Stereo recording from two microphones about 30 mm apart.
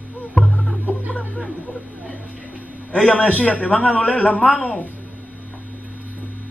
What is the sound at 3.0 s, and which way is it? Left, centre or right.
Speech, left.